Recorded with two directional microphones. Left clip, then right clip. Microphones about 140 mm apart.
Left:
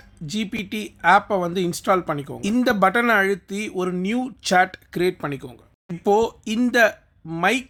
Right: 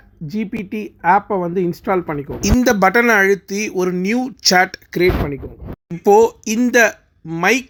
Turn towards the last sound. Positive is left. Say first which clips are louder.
# right 5 dB
turn(degrees=-10)  # may be behind; listen again after turning